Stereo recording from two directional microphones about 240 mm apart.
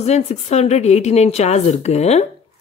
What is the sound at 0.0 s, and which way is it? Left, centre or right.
Speech, left.